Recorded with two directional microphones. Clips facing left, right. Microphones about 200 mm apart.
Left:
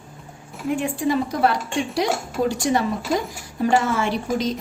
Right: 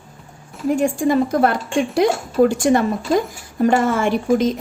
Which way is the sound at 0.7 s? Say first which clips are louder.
Right 5 dB; 45° right (ahead or behind).